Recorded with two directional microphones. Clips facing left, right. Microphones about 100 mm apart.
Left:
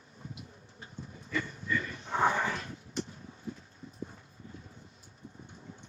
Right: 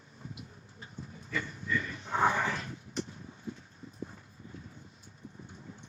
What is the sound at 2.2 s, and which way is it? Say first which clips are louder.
Dog: even; 30° left (ahead or behind).